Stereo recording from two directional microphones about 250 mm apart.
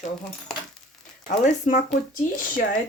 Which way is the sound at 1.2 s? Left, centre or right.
Left.